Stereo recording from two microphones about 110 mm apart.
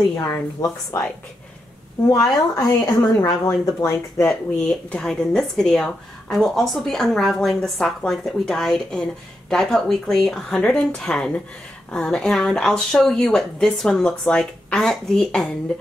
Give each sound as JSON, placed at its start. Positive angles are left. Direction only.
{"t": 0.3, "sound": "a woman's voice", "side_deg": 35}
{"t": 2.5, "sound": "a woman's voice", "side_deg": 30}
{"t": 4.2, "sound": "speech", "side_deg": 15}